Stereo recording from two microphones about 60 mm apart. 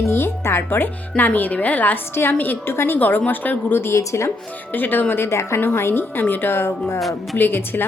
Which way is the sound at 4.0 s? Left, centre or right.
Left.